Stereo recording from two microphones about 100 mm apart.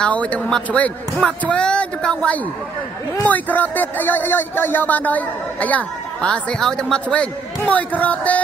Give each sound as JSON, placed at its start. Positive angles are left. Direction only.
{"t": 0.0, "sound": "speech", "side_deg": 15}